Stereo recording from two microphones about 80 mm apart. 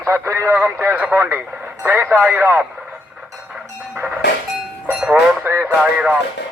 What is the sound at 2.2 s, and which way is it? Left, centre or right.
Speech, right.